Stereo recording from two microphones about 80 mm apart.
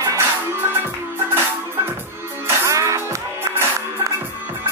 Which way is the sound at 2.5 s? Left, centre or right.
Right.